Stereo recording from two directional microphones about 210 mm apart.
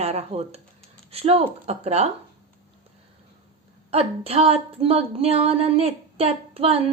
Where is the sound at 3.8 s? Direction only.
30° right (ahead or behind).